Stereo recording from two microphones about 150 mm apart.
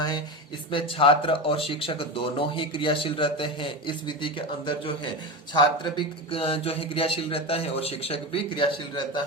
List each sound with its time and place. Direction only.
0.7 s speech: 35° left (ahead or behind)